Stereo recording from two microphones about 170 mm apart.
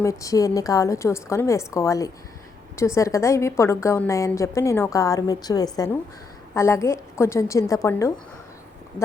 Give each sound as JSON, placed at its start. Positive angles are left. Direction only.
{"t": 0.0, "sound": "a woman's voice", "side_deg": 20}